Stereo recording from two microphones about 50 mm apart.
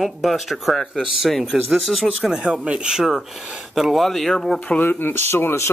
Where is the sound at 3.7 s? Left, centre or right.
Centre.